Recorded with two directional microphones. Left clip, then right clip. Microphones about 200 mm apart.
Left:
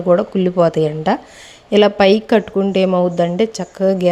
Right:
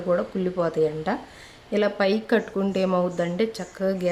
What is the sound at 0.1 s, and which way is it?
Speech, 35° left (ahead or behind).